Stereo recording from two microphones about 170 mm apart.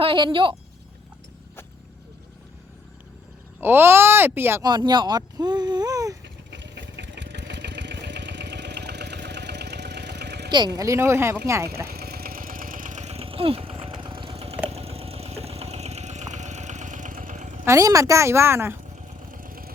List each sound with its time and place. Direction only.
0.0 s speech: 30° right (ahead or behind)
3.6 s a woman's voice: 10° right (ahead or behind)
4.7 s speech: 25° right (ahead or behind)
6.2 s vehicle: 90° right
10.8 s a woman's voice: 15° right (ahead or behind)
11.9 s engine: 65° right (ahead or behind); by 14.5 s 35° right (ahead or behind)
14.7 s vehicle: 35° right (ahead or behind)
17.7 s a woman's voice: 20° right (ahead or behind)
19.0 s vehicle: 55° right (ahead or behind)